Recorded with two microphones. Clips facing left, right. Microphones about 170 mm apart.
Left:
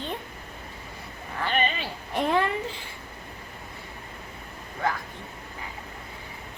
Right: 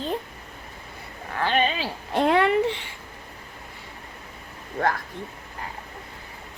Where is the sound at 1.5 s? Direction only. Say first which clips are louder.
Right 3 dB; 85° right.